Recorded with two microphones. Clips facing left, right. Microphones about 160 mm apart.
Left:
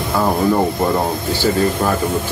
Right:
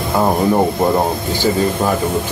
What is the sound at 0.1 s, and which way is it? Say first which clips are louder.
Speech: right 1 dB; 20° right (ahead or behind).